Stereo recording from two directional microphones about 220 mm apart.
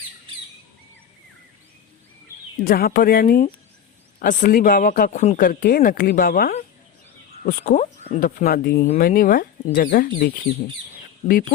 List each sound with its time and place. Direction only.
2.6 s speech: 40° left (ahead or behind)